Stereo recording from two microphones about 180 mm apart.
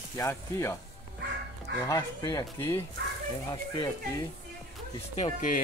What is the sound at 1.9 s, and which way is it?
Speech, 20° left (ahead or behind).